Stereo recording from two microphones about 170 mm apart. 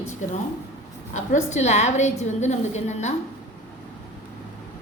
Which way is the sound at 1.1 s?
45° left (ahead or behind).